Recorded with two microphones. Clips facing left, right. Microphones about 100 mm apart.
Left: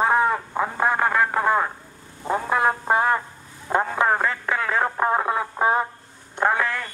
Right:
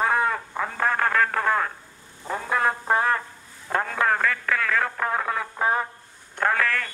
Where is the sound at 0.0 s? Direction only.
20° left (ahead or behind).